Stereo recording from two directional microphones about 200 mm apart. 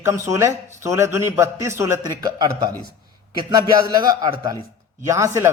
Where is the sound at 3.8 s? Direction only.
20° right (ahead or behind).